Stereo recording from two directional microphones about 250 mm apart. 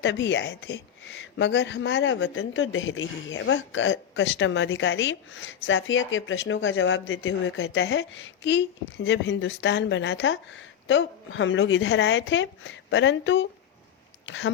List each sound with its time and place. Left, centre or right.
0.0 s speech: left